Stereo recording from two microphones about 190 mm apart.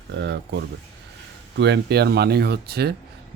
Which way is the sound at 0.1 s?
70° right (ahead or behind).